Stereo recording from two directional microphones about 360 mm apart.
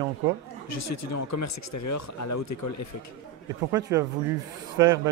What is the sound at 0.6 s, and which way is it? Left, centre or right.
Speech, left.